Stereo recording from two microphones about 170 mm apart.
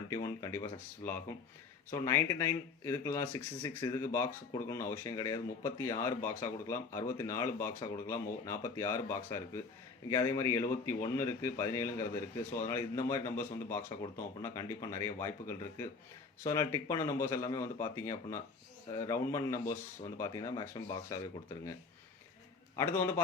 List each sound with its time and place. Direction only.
0.1 s a man's voice: 20° left (ahead or behind)
22.7 s a man's voice: 15° left (ahead or behind)